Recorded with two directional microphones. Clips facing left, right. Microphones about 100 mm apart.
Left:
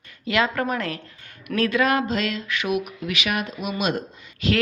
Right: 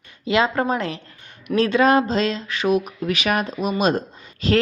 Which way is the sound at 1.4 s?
25° right (ahead or behind).